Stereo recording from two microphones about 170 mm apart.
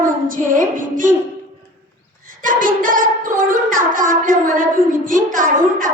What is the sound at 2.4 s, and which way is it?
A woman's voice, 55° right (ahead or behind).